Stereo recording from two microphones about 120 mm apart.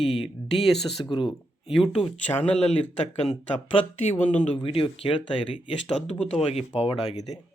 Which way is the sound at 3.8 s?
65° left (ahead or behind).